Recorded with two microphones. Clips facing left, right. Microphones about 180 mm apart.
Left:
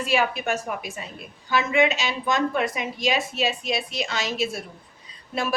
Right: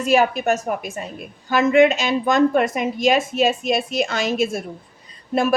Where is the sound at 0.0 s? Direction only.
45° right (ahead or behind).